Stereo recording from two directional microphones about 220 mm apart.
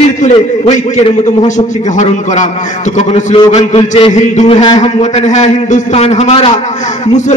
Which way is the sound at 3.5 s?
30° left (ahead or behind).